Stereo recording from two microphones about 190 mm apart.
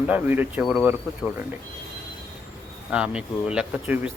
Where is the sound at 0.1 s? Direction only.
10° right (ahead or behind).